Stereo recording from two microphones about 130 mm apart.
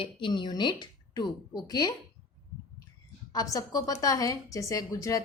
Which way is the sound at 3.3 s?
30° left (ahead or behind).